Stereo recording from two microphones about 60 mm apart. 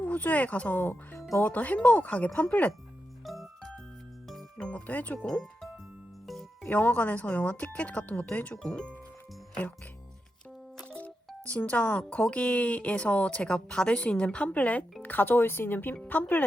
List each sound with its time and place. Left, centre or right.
0.0 s speech: left
3.2 s music: centre
4.9 s speech: left
5.2 s speech: centre
6.2 s music: centre
6.7 s speech: left
8.5 s speech: centre
10.8 s music: left
11.4 s speech: left